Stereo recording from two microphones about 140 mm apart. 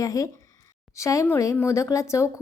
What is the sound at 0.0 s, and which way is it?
Speech, 25° left (ahead or behind).